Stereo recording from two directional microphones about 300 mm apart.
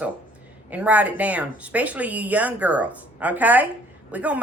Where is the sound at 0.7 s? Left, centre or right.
Centre.